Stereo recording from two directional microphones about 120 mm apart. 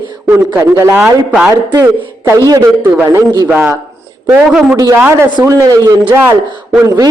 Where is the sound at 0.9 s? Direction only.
10° right (ahead or behind).